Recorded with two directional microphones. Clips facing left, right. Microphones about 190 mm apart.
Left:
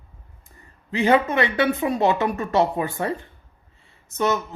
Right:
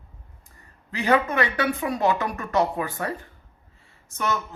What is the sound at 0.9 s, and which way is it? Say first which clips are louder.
Speech: left 3 dB; 25° left (ahead or behind).